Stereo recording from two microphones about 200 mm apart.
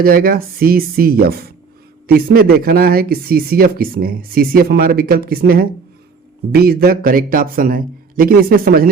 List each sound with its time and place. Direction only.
0.0 s speech: 45° right (ahead or behind)